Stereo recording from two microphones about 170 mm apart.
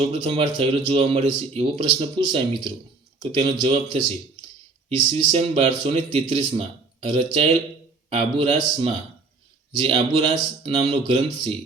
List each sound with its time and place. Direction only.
0.0 s speech: 35° right (ahead or behind)
5.1 s speech: 40° right (ahead or behind)